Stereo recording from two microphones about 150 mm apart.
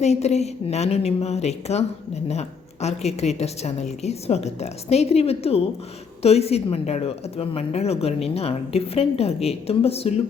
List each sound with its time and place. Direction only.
0.0 s a woman's voice: 45° left (ahead or behind)